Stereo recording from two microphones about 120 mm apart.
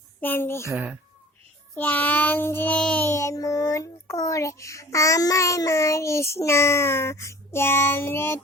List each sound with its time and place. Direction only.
0.2 s a child's voice: 15° left (ahead or behind)
0.7 s speech: 15° right (ahead or behind)
1.7 s child singing: 15° left (ahead or behind)
3.1 s a child's voice: 25° left (ahead or behind)